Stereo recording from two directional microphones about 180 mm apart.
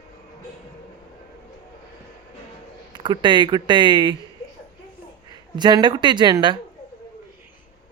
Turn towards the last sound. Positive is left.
turn(degrees=-25)  # may be behind; listen again after turning